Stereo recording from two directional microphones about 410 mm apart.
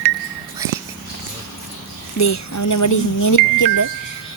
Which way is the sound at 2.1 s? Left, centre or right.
Left.